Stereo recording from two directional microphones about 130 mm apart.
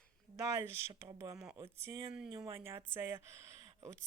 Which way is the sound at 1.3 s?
5° right (ahead or behind).